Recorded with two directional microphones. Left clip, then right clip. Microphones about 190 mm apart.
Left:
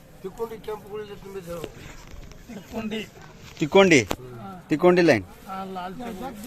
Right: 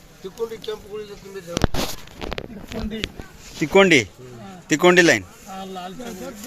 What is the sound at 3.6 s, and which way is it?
Speech, 10° right (ahead or behind).